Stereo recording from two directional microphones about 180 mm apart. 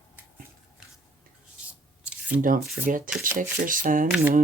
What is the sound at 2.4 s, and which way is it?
Speech, 50° right (ahead or behind).